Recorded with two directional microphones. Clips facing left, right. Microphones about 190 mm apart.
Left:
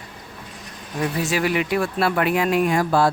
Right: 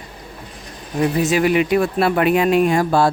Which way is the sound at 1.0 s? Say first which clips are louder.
Right 6 dB; 20° right (ahead or behind).